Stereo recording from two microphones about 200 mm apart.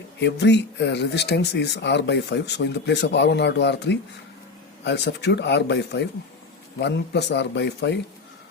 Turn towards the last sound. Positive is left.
turn(degrees=60)  # may be behind; listen again after turning